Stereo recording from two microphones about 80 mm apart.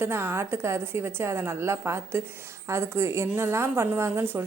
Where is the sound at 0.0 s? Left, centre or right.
Right.